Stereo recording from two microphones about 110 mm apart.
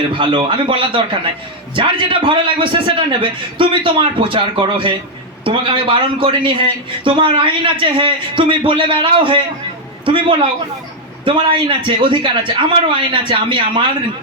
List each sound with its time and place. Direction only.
0.1 s a man's voice: 50° right (ahead or behind)
11.3 s a man's voice: 50° right (ahead or behind)